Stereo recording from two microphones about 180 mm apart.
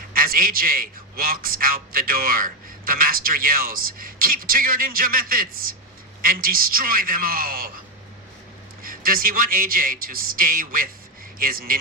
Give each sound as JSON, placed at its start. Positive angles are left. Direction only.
{"t": 0.1, "sound": "a man's voice", "side_deg": -55}
{"t": 8.8, "sound": "a man's voice", "side_deg": -55}